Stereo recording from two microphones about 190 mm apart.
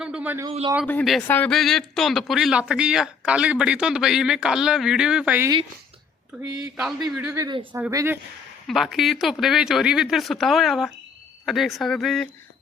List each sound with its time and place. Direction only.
0.0 s a man's voice: 5° right (ahead or behind)
0.9 s speech: 5° left (ahead or behind)
6.7 s speech: 5° right (ahead or behind)
7.3 s speech: 20° right (ahead or behind)
7.7 s speech: 10° right (ahead or behind)
8.6 s speech: centre (ahead or behind)